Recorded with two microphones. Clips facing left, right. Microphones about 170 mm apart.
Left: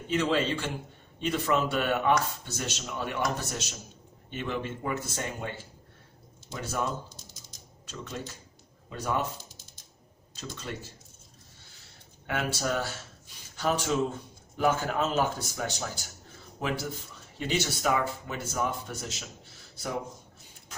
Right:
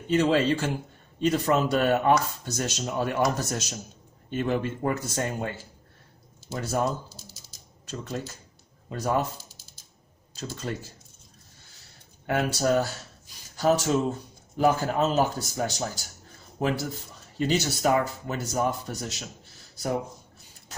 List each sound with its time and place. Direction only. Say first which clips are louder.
0.1 s speech: right 5 dB; 40° right (ahead or behind)
6.5 s speech: right 5 dB; 40° right (ahead or behind)
8.1 s speech: right 4 dB; 50° right (ahead or behind)
9.4 s typing: left 1 dB; 10° right (ahead or behind)
12.2 s a man's voice: right 6 dB; 40° right (ahead or behind)